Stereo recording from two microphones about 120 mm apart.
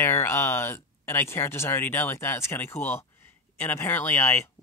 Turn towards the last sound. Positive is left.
turn(degrees=20)  # may be behind; listen again after turning